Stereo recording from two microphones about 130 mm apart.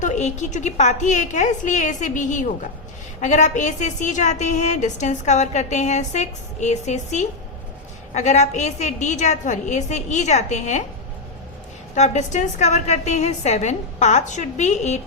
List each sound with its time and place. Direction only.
0.0 s a woman's voice: 65° left (ahead or behind)
11.9 s a woman's voice: 60° left (ahead or behind)